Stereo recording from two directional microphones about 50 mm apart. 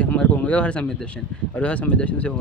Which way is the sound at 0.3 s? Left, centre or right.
Left.